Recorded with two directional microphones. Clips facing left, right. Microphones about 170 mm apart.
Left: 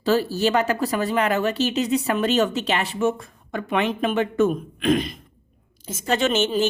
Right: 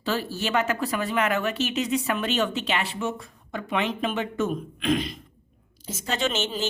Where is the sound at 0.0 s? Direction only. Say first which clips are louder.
Left 8 dB; 40° left (ahead or behind).